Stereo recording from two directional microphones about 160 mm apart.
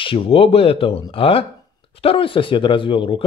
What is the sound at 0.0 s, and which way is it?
Speech, 35° left (ahead or behind).